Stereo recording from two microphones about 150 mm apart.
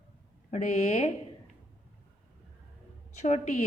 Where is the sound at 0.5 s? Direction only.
50° left (ahead or behind).